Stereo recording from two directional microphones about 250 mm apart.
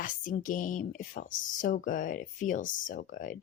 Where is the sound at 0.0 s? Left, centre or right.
Left.